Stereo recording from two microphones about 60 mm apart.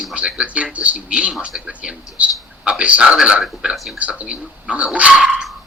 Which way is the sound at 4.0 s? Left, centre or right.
Right.